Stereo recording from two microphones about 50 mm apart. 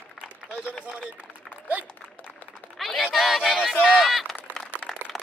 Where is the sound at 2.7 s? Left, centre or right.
Centre.